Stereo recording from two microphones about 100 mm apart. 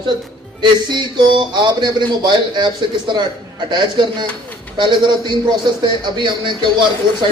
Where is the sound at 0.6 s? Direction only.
50° right (ahead or behind).